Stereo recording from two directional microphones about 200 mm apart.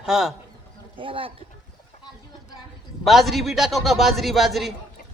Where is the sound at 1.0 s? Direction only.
25° right (ahead or behind).